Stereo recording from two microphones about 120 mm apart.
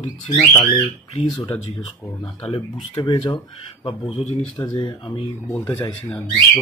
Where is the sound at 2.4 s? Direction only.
55° left (ahead or behind).